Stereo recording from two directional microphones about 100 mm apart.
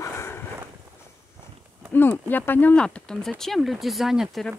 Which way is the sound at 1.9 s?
20° left (ahead or behind).